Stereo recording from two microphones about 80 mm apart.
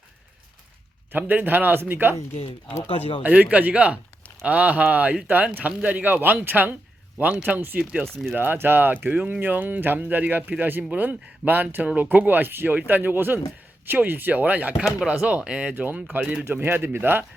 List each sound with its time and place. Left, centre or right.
1.1 s speech: right
3.2 s speech: centre